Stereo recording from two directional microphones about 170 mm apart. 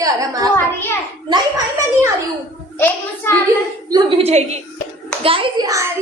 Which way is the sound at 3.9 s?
35° right (ahead or behind).